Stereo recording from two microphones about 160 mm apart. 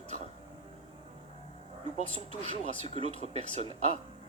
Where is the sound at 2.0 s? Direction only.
45° right (ahead or behind).